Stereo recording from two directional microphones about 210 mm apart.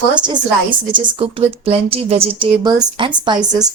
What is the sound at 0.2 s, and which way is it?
A woman's voice, 20° right (ahead or behind).